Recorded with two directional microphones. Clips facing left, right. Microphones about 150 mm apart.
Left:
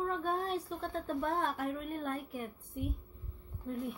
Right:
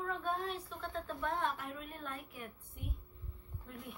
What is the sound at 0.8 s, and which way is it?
A woman's voice, 40° left (ahead or behind).